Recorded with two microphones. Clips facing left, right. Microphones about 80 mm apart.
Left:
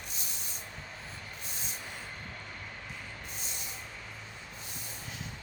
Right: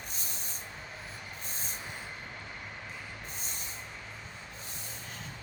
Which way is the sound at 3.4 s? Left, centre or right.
Right.